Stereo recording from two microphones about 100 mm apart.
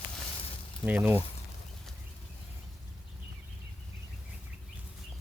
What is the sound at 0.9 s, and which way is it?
Speech, 20° right (ahead or behind).